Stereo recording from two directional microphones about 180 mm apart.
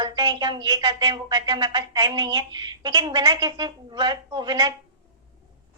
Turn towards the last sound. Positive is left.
turn(degrees=-25)  # may be behind; listen again after turning